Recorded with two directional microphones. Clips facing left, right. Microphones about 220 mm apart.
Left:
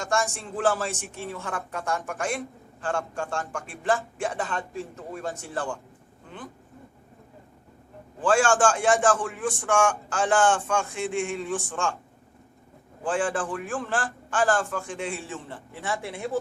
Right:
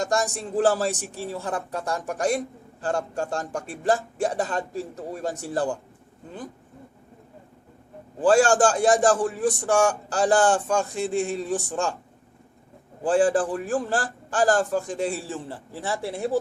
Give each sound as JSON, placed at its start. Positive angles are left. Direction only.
{"t": 0.0, "sound": "a man's voice", "side_deg": -40}
{"t": 8.2, "sound": "a man's voice", "side_deg": -40}
{"t": 13.1, "sound": "a man's voice", "side_deg": -40}